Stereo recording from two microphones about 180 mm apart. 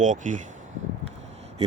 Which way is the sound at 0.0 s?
45° right (ahead or behind).